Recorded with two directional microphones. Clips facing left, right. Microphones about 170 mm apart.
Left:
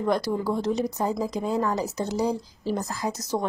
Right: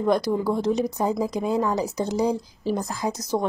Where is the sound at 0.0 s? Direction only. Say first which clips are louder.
Right 3 dB; 15° right (ahead or behind).